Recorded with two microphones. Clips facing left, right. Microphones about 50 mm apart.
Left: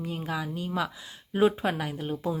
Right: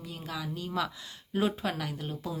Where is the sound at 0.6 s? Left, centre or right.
Centre.